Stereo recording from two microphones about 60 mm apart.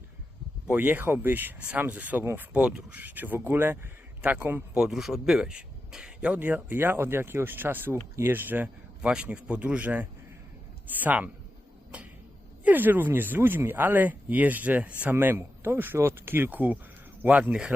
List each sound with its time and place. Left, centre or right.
0.7 s speech: right
2.9 s speech: right
4.9 s speech: centre; by 8.7 s right
9.0 s speech: centre
12.6 s speech: right
15.2 s speech: right
17.5 s speech: centre